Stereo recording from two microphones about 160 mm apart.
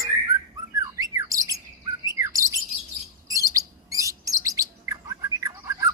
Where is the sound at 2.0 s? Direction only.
20° right (ahead or behind).